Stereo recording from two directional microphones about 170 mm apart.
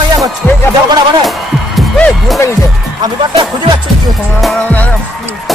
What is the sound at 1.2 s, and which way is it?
Music, centre (ahead or behind).